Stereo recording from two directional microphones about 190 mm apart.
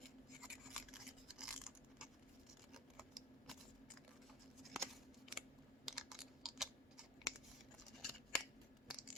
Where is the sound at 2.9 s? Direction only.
Centre (ahead or behind).